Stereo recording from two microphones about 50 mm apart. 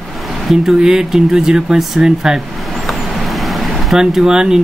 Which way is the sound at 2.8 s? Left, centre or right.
Centre.